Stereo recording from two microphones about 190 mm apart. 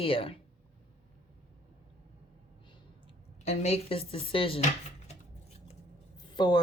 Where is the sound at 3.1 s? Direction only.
35° left (ahead or behind).